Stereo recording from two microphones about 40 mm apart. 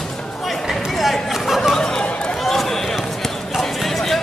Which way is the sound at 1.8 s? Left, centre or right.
Centre.